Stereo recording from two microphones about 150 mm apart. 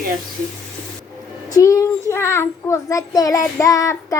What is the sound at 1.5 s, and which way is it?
A child's voice, 20° left (ahead or behind).